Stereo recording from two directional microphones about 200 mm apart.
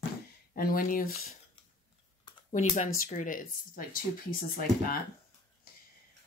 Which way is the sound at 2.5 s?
40° left (ahead or behind).